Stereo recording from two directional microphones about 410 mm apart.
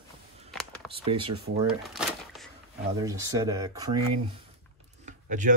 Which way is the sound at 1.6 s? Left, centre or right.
Centre.